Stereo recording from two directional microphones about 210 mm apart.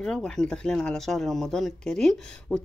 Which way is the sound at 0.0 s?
5° left (ahead or behind).